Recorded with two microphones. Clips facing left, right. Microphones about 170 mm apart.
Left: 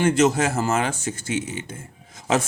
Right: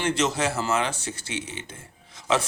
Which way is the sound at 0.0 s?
50° left (ahead or behind).